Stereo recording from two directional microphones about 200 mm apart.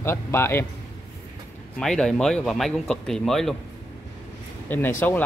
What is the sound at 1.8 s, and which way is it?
Speech, 5° left (ahead or behind).